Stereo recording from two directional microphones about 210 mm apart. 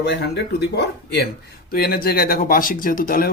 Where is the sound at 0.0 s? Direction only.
55° left (ahead or behind).